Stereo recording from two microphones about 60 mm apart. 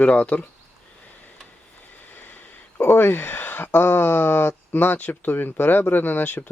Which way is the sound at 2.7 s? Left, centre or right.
Left.